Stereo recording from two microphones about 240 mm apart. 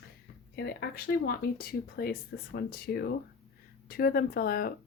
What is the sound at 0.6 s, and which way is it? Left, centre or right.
Speech, left.